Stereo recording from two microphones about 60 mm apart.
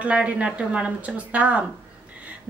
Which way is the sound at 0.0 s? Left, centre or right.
Right.